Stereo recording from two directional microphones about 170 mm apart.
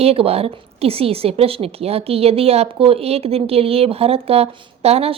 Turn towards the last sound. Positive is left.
turn(degrees=-35)  # may be behind; listen again after turning